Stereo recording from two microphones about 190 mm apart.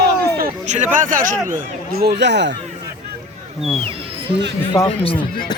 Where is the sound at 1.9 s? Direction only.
60° right (ahead or behind).